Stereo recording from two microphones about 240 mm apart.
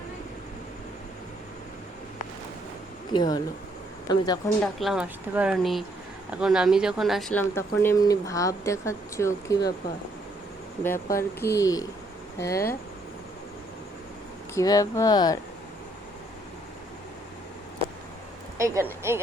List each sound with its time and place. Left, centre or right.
3.1 s speech: centre
4.6 s speech: centre
10.8 s speech: centre
14.5 s speech: centre
18.5 s speech: centre